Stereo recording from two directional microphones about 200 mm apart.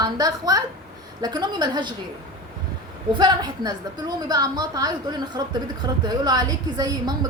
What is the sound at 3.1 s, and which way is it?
A woman's voice, 20° right (ahead or behind).